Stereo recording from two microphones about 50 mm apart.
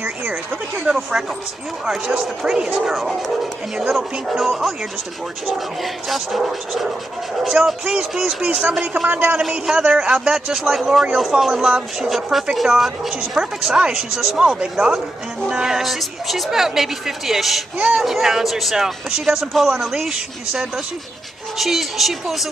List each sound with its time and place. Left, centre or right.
0.3 s speech: centre
2.4 s speech: centre
2.9 s speech: centre
5.8 s speech: centre
8.8 s speech: right
9.1 s speech: right
9.8 s speech: centre
14.4 s speech: centre
17.7 s speech: centre
18.0 s speech: centre